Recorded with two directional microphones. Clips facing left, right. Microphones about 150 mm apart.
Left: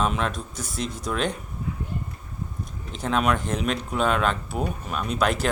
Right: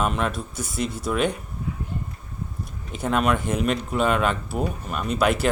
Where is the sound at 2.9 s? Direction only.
5° right (ahead or behind).